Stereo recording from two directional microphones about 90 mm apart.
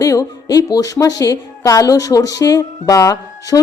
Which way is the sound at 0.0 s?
40° left (ahead or behind).